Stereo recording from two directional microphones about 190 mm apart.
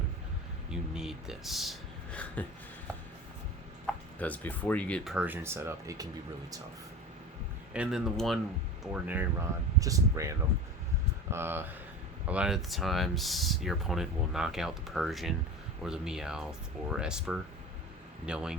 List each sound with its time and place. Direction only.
0.7 s a sound: 5° right (ahead or behind)
4.2 s speech: 10° left (ahead or behind); by 6.1 s 15° right (ahead or behind)
7.7 s speech: 5° right (ahead or behind)